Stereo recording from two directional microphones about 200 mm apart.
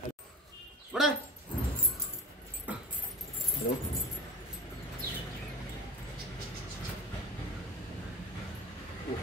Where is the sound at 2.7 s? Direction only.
5° right (ahead or behind).